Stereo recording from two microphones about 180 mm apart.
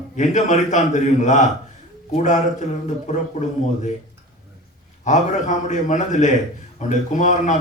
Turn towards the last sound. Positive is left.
turn(degrees=40)  # may be behind; listen again after turning